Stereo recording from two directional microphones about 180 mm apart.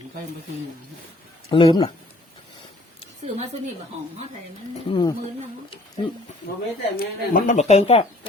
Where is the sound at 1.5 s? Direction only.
25° left (ahead or behind).